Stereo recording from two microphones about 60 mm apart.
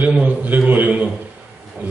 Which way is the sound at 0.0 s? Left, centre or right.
Right.